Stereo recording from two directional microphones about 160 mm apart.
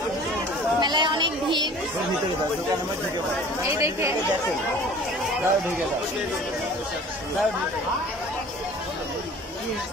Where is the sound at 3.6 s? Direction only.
15° right (ahead or behind).